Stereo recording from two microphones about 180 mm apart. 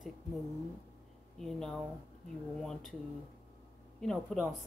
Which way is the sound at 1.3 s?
Centre (ahead or behind).